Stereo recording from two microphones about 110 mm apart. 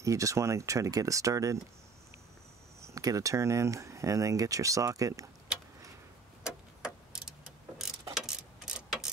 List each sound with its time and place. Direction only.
0.0 s speech: 30° right (ahead or behind)
2.8 s speech: 30° right (ahead or behind)
6.4 s vehicle: 5° right (ahead or behind)
8.1 s mechanisms: 5° right (ahead or behind)